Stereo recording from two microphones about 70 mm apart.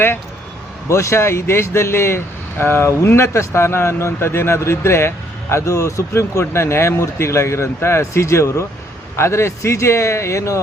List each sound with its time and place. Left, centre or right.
0.9 s a man's voice: left